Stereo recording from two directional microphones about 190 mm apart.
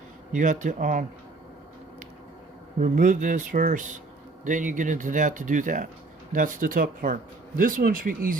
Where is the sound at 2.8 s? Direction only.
45° right (ahead or behind).